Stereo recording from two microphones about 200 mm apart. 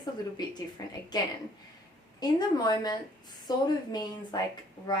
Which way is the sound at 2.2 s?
20° left (ahead or behind).